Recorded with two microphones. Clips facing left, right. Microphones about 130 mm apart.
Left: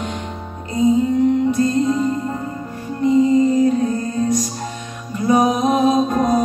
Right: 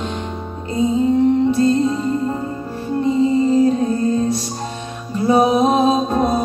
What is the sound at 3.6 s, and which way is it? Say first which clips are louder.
Music: right 1 dB; 30° right (ahead or behind).